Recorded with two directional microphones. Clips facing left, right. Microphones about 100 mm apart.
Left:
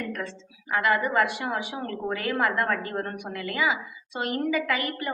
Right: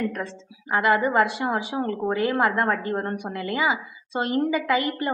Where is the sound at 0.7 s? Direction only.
25° right (ahead or behind).